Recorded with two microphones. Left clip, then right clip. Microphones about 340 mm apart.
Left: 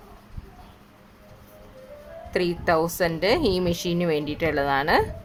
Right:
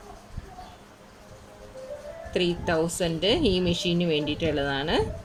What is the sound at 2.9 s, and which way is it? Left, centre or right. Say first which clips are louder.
Speech: left 3 dB; centre.